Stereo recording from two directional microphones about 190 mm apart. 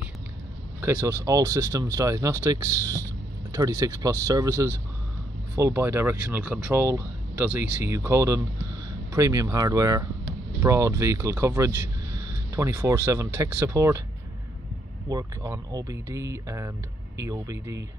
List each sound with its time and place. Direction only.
0.7 s speech: 15° right (ahead or behind)
15.0 s speech: 15° right (ahead or behind)